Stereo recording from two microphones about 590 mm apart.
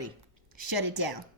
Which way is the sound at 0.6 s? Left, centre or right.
Right.